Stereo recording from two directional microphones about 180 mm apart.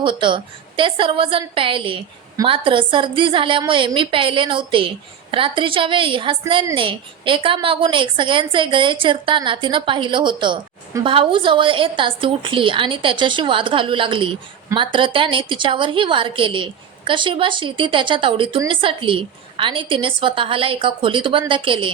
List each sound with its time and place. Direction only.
0.0 s a woman's voice: 25° right (ahead or behind)